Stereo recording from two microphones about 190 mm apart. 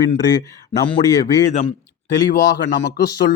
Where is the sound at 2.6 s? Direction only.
65° left (ahead or behind).